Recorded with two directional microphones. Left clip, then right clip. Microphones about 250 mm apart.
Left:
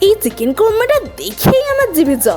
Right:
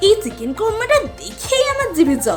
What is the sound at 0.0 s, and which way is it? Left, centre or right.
A woman's voice, left.